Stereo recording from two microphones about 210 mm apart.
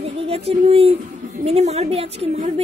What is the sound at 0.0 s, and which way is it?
A woman's voice, 30° right (ahead or behind).